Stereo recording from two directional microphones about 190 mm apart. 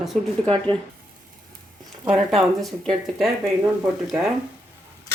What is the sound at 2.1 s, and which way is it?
Speech, centre (ahead or behind).